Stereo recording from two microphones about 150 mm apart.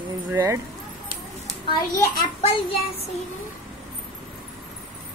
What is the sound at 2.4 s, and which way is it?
Child singing, 40° left (ahead or behind).